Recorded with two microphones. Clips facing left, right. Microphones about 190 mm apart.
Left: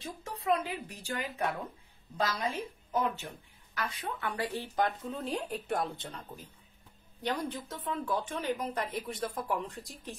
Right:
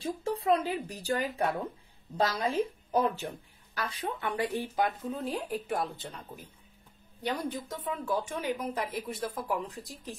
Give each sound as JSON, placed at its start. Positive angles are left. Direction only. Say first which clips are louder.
{"t": 0.0, "sound": "a woman's voice", "louder": "right 7 dB", "side_deg": -30}